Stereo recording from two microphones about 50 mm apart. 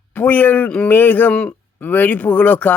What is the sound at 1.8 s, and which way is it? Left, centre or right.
Speech, left.